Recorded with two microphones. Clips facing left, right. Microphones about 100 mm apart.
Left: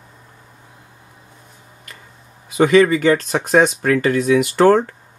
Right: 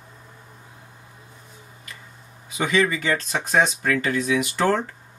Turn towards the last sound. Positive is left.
turn(degrees=55)  # may be behind; listen again after turning